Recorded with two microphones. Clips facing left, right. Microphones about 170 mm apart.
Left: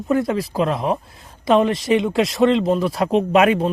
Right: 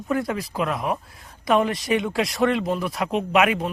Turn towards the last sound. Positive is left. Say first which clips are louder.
# left 5 dB
turn(degrees=30)  # may be behind; listen again after turning